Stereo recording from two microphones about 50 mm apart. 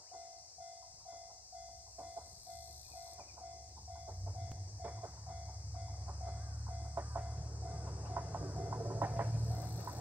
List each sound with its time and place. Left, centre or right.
3.9 s train: right
6.7 s music: right
7.2 s a sound: right